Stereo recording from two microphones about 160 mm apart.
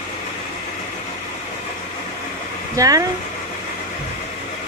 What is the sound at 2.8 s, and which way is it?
Speech, 20° right (ahead or behind).